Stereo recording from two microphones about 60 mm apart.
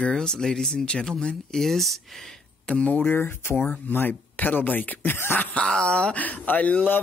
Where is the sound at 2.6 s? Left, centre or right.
Left.